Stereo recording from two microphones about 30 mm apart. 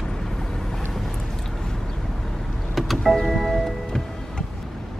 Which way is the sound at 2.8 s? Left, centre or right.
Centre.